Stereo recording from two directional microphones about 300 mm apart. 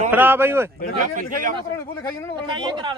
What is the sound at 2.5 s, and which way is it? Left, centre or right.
Speech, centre.